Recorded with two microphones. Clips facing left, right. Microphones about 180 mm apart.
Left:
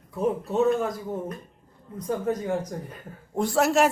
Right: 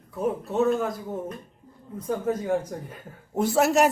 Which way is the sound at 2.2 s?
5° right (ahead or behind).